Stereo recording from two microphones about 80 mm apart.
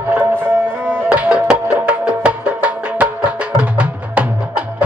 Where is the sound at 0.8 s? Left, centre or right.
Centre.